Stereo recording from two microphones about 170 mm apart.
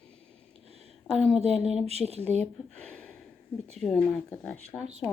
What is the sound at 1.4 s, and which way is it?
Speech, 40° right (ahead or behind).